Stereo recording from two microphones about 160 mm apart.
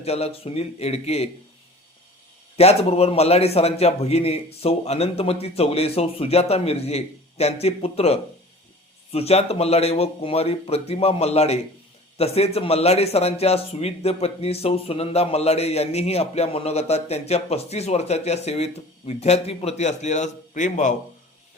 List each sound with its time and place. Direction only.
0.0 s a man's voice: 40° left (ahead or behind)
2.6 s a man's voice: 40° left (ahead or behind)